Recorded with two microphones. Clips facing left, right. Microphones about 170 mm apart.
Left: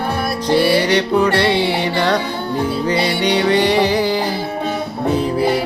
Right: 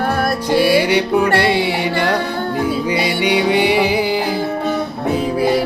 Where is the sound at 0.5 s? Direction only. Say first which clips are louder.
Right 1 dB; 10° right (ahead or behind).